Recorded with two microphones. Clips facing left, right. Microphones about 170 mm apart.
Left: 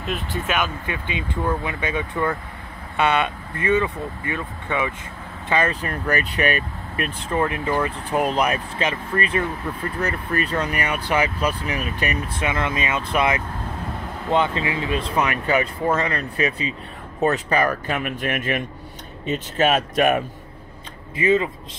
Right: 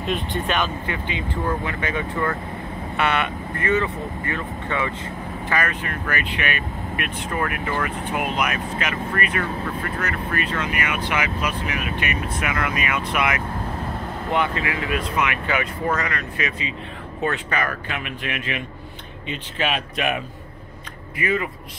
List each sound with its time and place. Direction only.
0.0 s speech: 5° left (ahead or behind)
0.8 s speech: 15° left (ahead or behind)
5.5 s speech: 25° left (ahead or behind)
5.8 s speech: 35° left (ahead or behind)
7.3 s speech: 25° left (ahead or behind); by 20.2 s 45° left (ahead or behind)
21.2 s speech: 25° left (ahead or behind)